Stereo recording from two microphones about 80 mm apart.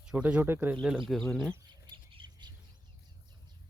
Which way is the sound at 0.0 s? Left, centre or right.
Centre.